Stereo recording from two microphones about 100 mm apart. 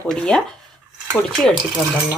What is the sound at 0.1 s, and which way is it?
Speech, 5° left (ahead or behind).